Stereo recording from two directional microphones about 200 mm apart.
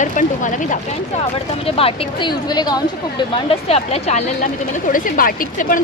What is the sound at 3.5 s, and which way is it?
Speech, 30° left (ahead or behind).